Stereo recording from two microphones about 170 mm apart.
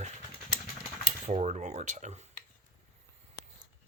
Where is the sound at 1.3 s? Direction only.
45° right (ahead or behind).